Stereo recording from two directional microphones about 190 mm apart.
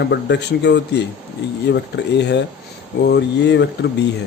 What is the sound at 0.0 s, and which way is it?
Speech, 65° left (ahead or behind).